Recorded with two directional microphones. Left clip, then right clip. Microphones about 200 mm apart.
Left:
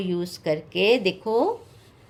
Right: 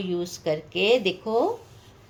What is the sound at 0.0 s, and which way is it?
A woman's voice, 25° left (ahead or behind).